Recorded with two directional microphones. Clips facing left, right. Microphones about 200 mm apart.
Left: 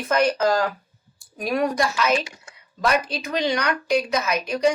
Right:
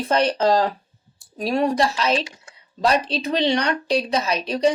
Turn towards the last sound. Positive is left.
turn(degrees=-30)  # may be behind; listen again after turning